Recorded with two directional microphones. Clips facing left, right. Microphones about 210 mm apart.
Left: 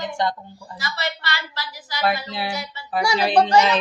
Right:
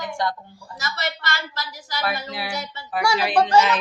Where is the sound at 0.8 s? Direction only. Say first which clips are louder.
Even; 45° right (ahead or behind).